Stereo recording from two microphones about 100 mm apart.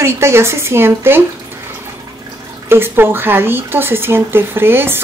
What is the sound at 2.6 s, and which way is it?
Speech, 25° right (ahead or behind).